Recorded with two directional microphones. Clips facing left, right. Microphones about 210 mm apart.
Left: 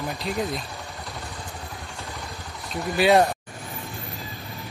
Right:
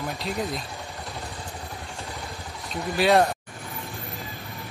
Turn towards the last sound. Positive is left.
turn(degrees=0)  # may be behind; listen again after turning